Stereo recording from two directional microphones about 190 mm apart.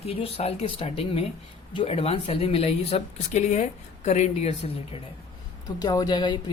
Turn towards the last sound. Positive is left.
turn(degrees=25)  # may be behind; listen again after turning